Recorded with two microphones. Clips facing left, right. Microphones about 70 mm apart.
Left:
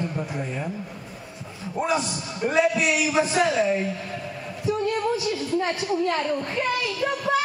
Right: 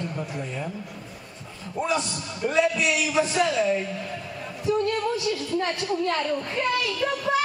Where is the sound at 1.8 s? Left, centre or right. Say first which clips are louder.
Left 2 dB; centre.